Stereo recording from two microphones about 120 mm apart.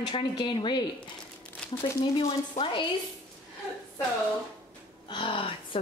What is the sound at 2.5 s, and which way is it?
Speech, 45° left (ahead or behind).